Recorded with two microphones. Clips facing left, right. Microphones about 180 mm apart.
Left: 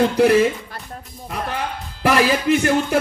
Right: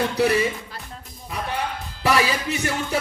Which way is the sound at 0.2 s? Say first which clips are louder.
Left 5 dB; 55° left (ahead or behind).